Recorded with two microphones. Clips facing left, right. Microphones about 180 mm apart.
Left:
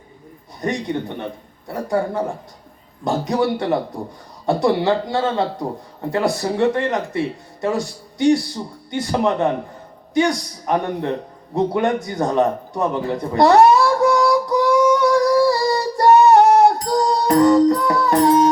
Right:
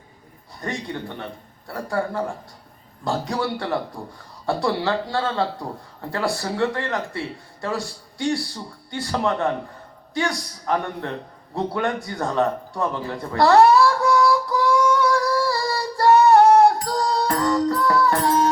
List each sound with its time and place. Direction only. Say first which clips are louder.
0.6 s a man's voice: left 6 dB; 20° left (ahead or behind)
11.5 s a sound: left 6 dB; 20° left (ahead or behind)
16.9 s music: left 6 dB; 20° left (ahead or behind)